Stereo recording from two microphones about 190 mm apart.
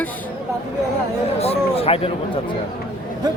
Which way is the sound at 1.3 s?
30° left (ahead or behind).